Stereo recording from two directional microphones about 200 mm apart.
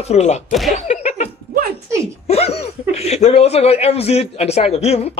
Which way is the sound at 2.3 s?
30° left (ahead or behind).